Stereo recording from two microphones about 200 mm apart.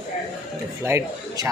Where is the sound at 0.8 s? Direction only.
10° right (ahead or behind).